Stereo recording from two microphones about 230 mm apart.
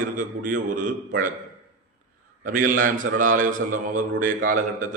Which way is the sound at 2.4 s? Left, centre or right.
Right.